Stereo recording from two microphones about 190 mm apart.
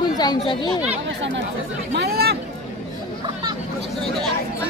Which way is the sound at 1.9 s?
55° right (ahead or behind).